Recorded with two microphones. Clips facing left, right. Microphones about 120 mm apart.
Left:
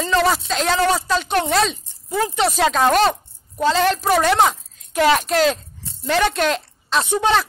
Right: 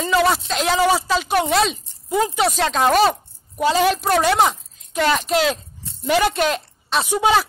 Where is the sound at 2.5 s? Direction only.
Centre (ahead or behind).